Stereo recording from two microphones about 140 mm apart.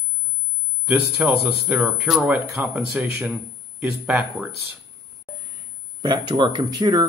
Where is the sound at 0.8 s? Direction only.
10° right (ahead or behind).